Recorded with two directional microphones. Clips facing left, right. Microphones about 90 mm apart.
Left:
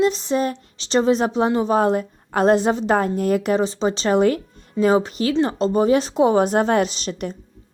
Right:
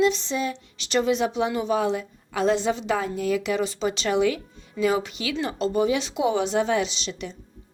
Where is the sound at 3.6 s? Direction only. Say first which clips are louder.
Left 5 dB; 35° left (ahead or behind); by 7.4 s 50° left (ahead or behind).